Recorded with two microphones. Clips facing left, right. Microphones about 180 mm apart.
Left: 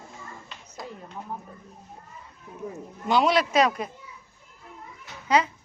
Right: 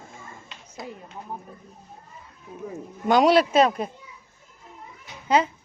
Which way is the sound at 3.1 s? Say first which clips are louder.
Right 4 dB; 40° right (ahead or behind).